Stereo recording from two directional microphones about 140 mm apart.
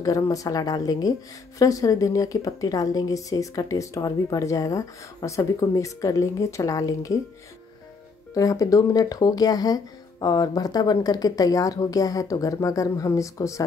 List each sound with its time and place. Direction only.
0.0 s a woman's voice: 25° left (ahead or behind)
8.4 s a woman's voice: 25° left (ahead or behind)